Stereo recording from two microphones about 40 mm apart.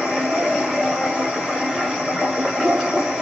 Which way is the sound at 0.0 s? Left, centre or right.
Centre.